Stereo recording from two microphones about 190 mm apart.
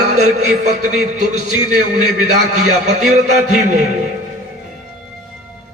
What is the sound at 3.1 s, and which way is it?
Speech, 40° right (ahead or behind).